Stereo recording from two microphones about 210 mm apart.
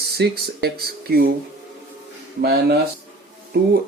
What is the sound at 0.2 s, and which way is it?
Speech, 50° right (ahead or behind).